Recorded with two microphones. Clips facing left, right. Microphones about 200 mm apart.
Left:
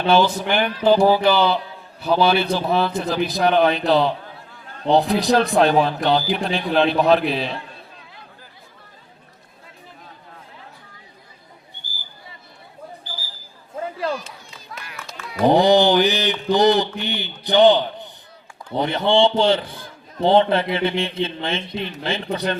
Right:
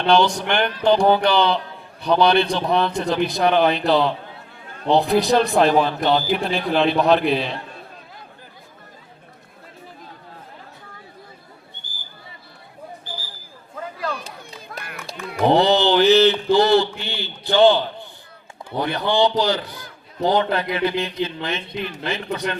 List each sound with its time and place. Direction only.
0.0 s speech: 5° left (ahead or behind)
14.3 s clapping: 55° right (ahead or behind)
15.5 s a man's voice: 15° left (ahead or behind); by 22.5 s 30° left (ahead or behind)